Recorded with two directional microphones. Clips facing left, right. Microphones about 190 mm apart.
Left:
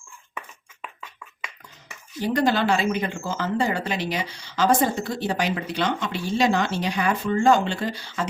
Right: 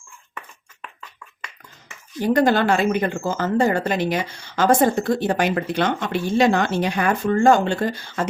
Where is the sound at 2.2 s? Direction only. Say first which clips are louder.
Right 4 dB; 50° right (ahead or behind).